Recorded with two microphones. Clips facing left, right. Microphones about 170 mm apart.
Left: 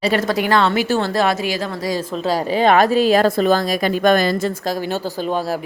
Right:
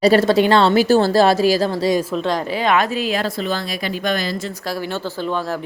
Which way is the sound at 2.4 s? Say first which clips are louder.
Left 7 dB; 35° left (ahead or behind).